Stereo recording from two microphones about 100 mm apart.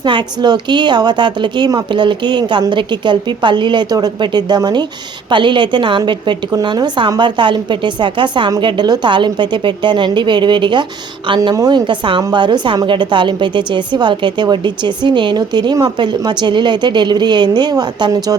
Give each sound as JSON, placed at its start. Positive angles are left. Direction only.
{"t": 0.0, "sound": "a woman's voice", "side_deg": -50}
{"t": 11.5, "sound": "a woman's voice", "side_deg": -35}
{"t": 11.9, "sound": "a woman's voice", "side_deg": -55}